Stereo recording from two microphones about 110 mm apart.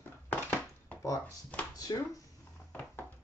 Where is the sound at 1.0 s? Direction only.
30° left (ahead or behind).